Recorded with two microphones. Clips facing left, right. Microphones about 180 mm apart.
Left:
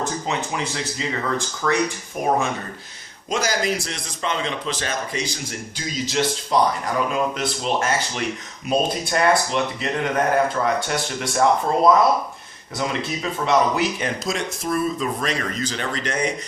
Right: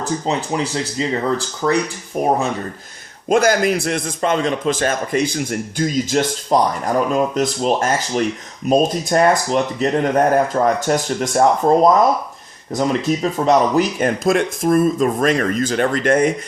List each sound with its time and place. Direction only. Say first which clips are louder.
0.0 s speech: right 4 dB; 35° right (ahead or behind)
3.2 s a man's voice: right 8 dB; 55° right (ahead or behind)
14.3 s a man's voice: right 12 dB; 55° right (ahead or behind)